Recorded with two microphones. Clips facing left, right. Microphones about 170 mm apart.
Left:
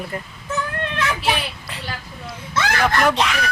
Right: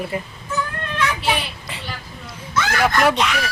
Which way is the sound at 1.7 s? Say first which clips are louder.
Even; centre (ahead or behind).